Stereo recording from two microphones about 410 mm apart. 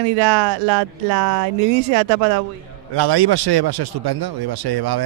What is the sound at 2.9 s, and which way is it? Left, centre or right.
Speech, right.